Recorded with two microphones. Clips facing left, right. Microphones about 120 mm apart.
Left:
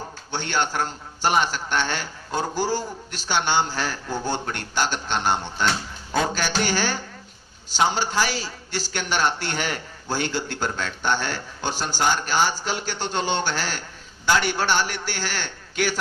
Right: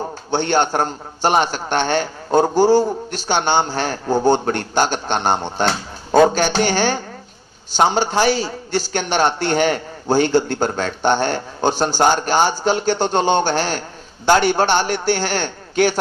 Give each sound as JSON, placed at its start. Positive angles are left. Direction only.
{"t": 0.3, "sound": "a man's voice", "side_deg": -55}